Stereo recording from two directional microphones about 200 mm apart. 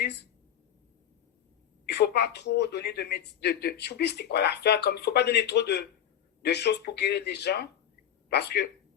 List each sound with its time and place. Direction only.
1.9 s speech: 55° left (ahead or behind)